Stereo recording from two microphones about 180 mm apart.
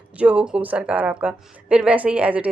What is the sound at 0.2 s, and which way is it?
A woman's voice, 5° right (ahead or behind).